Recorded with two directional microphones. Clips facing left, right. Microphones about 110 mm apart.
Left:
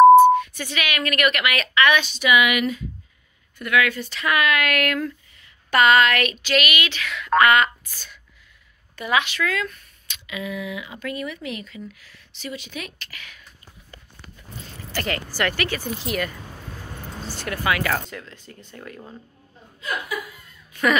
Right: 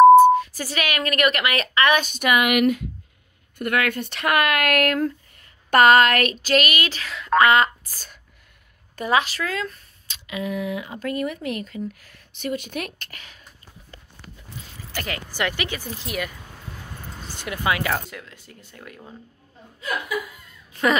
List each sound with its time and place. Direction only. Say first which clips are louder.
0.3 s speech: even; 35° right (ahead or behind); by 13.2 s 55° right (ahead or behind)
15.0 s speech: left 4 dB; 5° right (ahead or behind)
15.3 s speech: left 1 dB; 15° right (ahead or behind)
17.3 s speech: even; 20° right (ahead or behind)
18.1 s speech: left 2 dB; 5° right (ahead or behind)
20.7 s caw: even; 30° right (ahead or behind)